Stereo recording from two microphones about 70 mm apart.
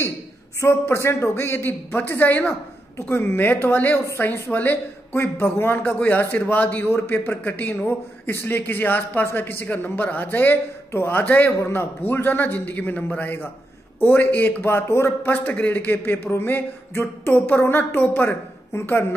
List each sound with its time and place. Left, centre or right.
0.6 s a man's voice: left
4.3 s a man's voice: left
15.3 s a man's voice: left
18.7 s a man's voice: left